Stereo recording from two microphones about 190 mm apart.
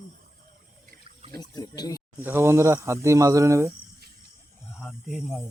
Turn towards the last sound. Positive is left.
turn(degrees=0)  # may be behind; listen again after turning